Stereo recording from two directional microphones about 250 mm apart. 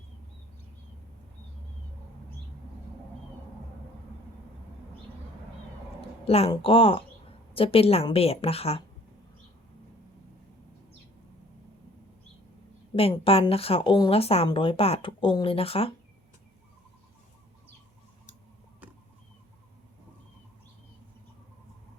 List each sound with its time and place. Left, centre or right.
6.0 s speech: left
13.0 s speech: left